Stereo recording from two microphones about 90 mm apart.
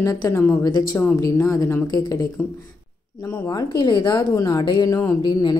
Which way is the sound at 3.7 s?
55° left (ahead or behind).